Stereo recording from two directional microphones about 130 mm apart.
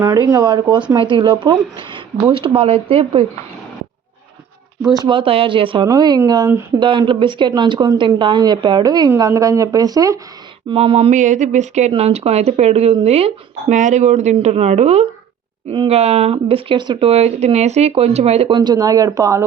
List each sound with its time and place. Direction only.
0.0 s a woman's voice: 25° right (ahead or behind); by 3.2 s 45° right (ahead or behind)
5.0 s speech: 40° right (ahead or behind)
5.8 s a woman's voice: 30° right (ahead or behind)
10.7 s speech: 45° right (ahead or behind)
11.1 s speech: 75° right (ahead or behind); by 13.7 s 50° right (ahead or behind)
13.7 s speech: 70° right (ahead or behind); by 17.1 s 35° right (ahead or behind)
17.1 s speech: 55° right (ahead or behind)
18.5 s speech: 30° right (ahead or behind)